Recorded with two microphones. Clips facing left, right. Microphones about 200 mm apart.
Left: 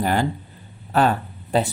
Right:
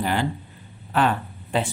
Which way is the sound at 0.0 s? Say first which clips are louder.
Left 3 dB; 45° left (ahead or behind).